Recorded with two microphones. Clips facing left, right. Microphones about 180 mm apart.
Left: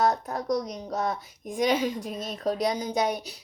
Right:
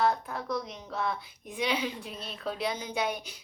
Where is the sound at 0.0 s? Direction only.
40° left (ahead or behind).